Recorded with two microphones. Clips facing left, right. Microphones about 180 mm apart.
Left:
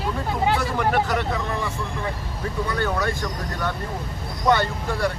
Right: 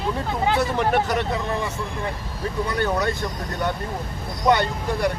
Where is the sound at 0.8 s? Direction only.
25° right (ahead or behind).